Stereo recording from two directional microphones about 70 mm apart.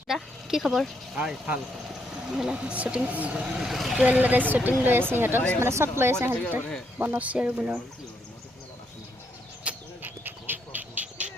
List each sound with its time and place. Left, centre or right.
0.1 s speech: centre
3.4 s speech: centre
4.0 s a woman's voice: right
7.0 s speech: right
9.6 s a sound: right